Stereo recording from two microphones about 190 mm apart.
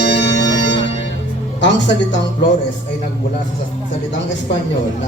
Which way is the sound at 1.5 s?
70° left (ahead or behind).